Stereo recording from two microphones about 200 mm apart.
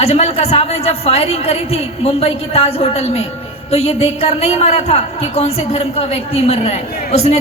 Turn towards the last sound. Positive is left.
turn(degrees=30)  # may be behind; listen again after turning